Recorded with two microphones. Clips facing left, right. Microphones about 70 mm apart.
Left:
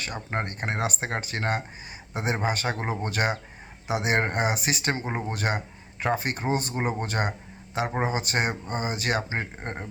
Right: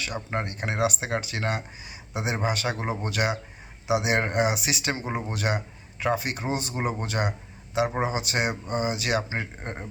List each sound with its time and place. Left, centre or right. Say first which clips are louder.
0.0 s speech: right 1 dB; left
5.3 s a sound: even; left
6.1 s speech: left 2 dB; left